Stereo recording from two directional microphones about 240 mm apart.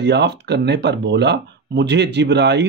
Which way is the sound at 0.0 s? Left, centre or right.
Right.